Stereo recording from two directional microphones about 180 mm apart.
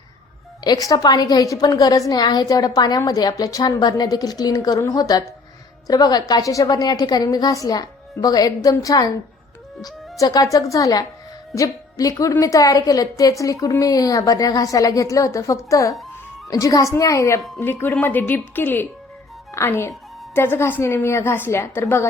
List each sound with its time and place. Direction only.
0.6 s a woman's voice: 20° left (ahead or behind)